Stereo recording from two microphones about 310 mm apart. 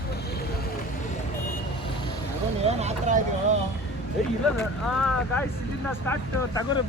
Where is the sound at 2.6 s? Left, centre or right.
Right.